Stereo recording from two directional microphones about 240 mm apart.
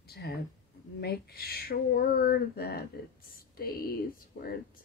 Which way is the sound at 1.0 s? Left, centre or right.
Left.